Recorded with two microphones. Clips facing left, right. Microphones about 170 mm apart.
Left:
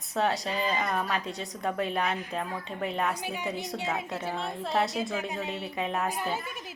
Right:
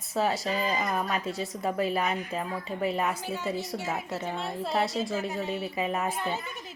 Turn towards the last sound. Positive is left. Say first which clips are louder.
# even
turn(degrees=5)  # may be behind; listen again after turning